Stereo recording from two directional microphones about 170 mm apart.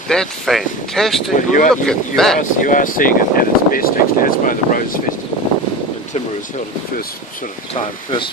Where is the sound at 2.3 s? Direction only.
50° left (ahead or behind).